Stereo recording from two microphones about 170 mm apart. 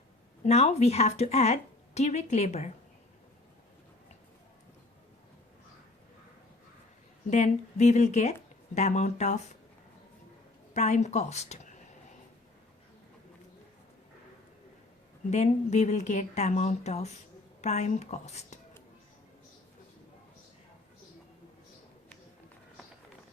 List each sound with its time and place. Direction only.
0.4 s speech: 40° left (ahead or behind)
7.3 s speech: 45° left (ahead or behind)
10.8 s speech: 45° left (ahead or behind)
15.3 s speech: 40° left (ahead or behind)